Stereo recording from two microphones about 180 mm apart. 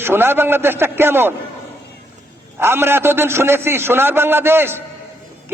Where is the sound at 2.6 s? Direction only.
15° right (ahead or behind).